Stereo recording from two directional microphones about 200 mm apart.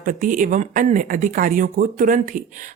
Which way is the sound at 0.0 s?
40° right (ahead or behind).